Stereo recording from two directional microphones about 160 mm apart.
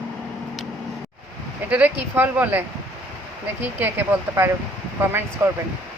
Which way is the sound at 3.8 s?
15° right (ahead or behind).